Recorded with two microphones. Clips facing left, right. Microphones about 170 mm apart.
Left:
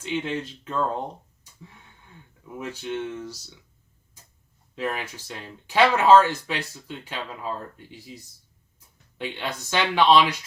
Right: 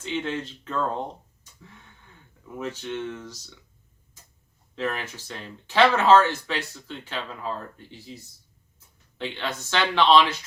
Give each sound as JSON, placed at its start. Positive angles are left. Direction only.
{"t": 0.1, "sound": "speech", "side_deg": 10}
{"t": 2.6, "sound": "speech", "side_deg": 10}
{"t": 4.7, "sound": "speech", "side_deg": 10}